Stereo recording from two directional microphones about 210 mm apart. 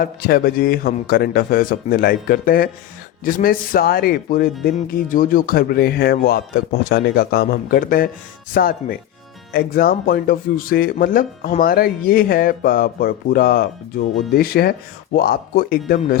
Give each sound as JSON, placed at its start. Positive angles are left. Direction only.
{"t": 0.0, "sound": "speech", "side_deg": 45}